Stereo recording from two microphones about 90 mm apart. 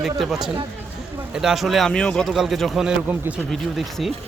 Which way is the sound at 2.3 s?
5° right (ahead or behind).